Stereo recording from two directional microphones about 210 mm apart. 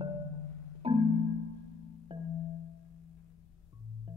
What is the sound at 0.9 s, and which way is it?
Marimba, 25° right (ahead or behind).